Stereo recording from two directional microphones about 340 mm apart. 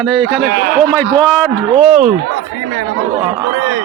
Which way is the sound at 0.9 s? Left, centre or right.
Centre.